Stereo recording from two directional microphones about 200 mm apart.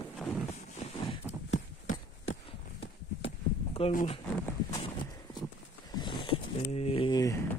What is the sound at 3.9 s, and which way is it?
Speech, 40° left (ahead or behind).